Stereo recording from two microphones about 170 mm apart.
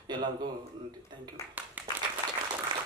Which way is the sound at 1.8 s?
10° right (ahead or behind).